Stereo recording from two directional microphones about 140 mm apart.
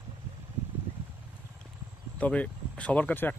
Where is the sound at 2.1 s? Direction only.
10° left (ahead or behind).